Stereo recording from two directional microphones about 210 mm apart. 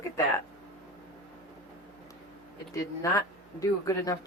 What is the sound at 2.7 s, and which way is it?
Speech, 15° left (ahead or behind).